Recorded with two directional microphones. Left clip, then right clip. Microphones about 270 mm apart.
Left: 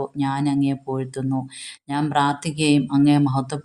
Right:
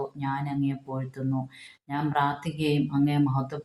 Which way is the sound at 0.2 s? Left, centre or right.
Left.